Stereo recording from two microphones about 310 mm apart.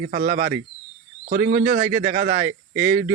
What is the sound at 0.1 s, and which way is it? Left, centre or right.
Speech, right.